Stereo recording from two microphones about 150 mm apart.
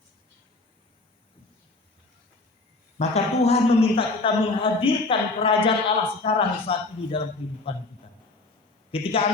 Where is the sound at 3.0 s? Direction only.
45° left (ahead or behind).